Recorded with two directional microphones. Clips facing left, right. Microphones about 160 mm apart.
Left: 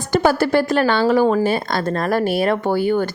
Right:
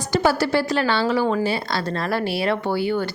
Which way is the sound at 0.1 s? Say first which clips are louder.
Left 4 dB; 50° left (ahead or behind).